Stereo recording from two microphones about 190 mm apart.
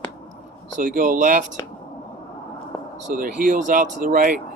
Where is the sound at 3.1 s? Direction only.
45° right (ahead or behind).